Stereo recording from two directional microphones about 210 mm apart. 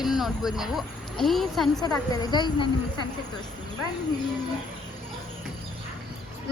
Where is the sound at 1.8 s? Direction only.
20° left (ahead or behind).